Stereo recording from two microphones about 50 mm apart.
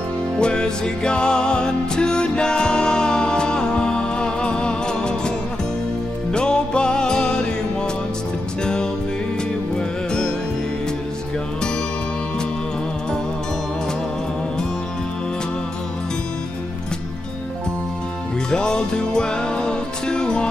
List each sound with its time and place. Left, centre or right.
0.4 s music: centre
6.3 s music: centre
9.8 s music: centre
18.5 s music: centre